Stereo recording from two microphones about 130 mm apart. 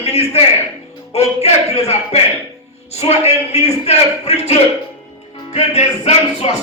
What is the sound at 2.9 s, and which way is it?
Music, 55° left (ahead or behind).